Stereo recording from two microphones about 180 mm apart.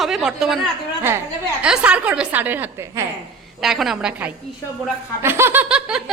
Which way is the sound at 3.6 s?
Centre (ahead or behind).